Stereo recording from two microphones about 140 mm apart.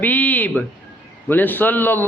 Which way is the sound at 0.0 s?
10° left (ahead or behind).